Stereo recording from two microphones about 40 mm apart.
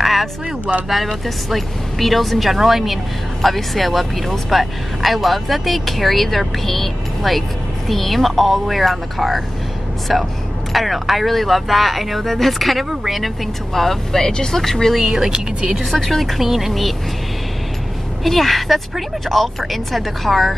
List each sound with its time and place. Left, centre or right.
0.0 s a sound: centre
1.0 s speech: centre
15.0 s speech: centre
15.7 s speech: centre
18.2 s speech: centre